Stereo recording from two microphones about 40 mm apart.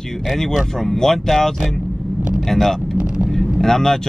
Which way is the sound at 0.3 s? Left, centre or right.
Centre.